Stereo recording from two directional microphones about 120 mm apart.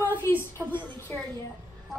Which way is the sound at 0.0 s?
20° left (ahead or behind).